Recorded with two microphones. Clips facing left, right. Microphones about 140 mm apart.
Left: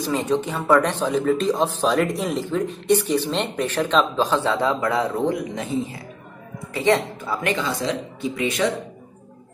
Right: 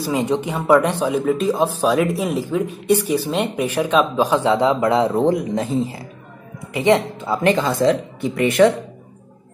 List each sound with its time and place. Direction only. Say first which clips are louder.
0.0 s a man's voice: right 2 dB; 15° right (ahead or behind); by 5.9 s 35° right (ahead or behind)
6.7 s speech: right 3 dB; 20° right (ahead or behind)
7.5 s speech: right 7 dB; 50° right (ahead or behind)